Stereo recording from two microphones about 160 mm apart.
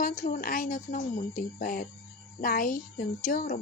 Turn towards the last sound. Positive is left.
turn(degrees=55)  # may be behind; listen again after turning